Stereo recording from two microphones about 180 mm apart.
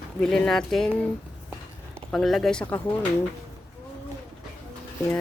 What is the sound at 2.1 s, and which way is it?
Speech, centre (ahead or behind).